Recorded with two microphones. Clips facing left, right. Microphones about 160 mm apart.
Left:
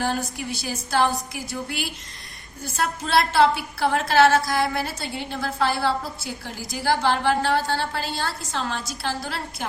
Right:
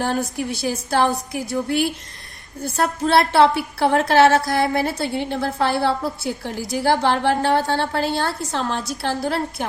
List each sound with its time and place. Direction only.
0.0 s a woman's voice: 55° right (ahead or behind)
2.6 s a woman's voice: 55° right (ahead or behind)